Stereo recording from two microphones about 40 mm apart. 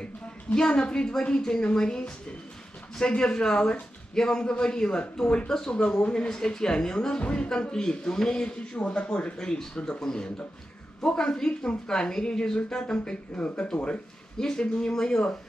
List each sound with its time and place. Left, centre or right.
0.6 s a woman's voice: left
5.5 s speech: centre
5.8 s a woman's voice: left
8.7 s a woman's voice: left
14.4 s a woman's voice: centre